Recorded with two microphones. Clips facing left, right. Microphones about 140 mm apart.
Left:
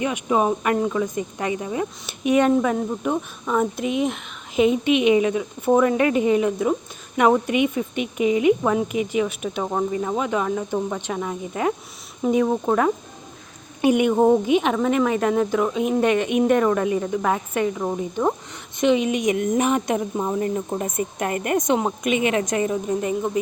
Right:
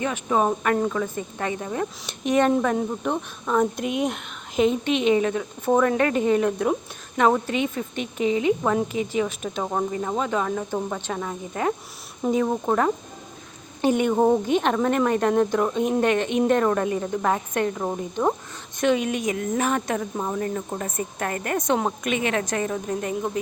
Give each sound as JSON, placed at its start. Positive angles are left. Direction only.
{"t": 0.0, "sound": "speech", "side_deg": 10}
{"t": 19.0, "sound": "speech", "side_deg": 10}
{"t": 21.8, "sound": "speech", "side_deg": 5}